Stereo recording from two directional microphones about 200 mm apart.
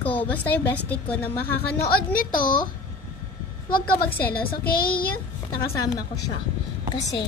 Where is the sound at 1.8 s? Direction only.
45° left (ahead or behind).